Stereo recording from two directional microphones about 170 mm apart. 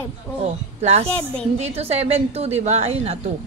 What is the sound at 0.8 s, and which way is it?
A woman's voice, 40° right (ahead or behind).